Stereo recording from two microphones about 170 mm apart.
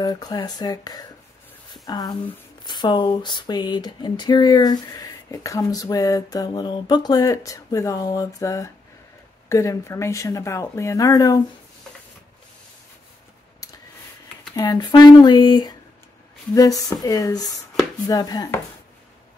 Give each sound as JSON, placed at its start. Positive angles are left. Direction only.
{"t": 0.0, "sound": "speech", "side_deg": 25}
{"t": 1.7, "sound": "a sound", "side_deg": 25}
{"t": 2.6, "sound": "speech", "side_deg": 25}
{"t": 14.5, "sound": "speech", "side_deg": 20}